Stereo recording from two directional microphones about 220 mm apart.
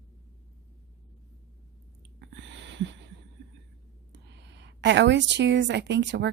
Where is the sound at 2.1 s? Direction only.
50° right (ahead or behind).